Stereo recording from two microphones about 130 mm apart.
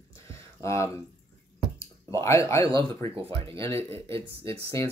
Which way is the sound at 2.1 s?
20° left (ahead or behind).